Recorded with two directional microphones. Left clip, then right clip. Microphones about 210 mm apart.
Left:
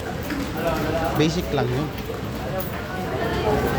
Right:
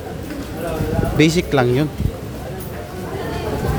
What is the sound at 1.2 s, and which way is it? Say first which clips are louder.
Speech: right 7 dB; 45° right (ahead or behind).